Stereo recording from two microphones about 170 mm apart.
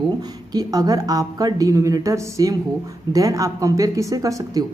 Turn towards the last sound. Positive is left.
turn(degrees=-20)  # may be behind; listen again after turning